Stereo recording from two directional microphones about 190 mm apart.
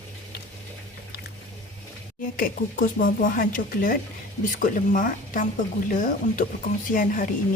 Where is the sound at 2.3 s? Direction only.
50° left (ahead or behind).